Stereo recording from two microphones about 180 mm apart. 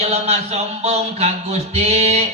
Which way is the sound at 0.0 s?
35° right (ahead or behind).